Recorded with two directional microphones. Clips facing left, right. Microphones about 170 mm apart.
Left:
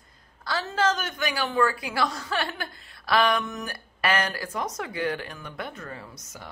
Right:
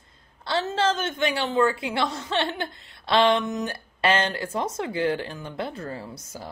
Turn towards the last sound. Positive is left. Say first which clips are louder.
# right 5 dB
turn(degrees=-30)  # may be behind; listen again after turning